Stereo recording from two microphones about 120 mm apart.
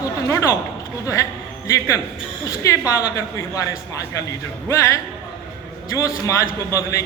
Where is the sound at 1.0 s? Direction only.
25° left (ahead or behind).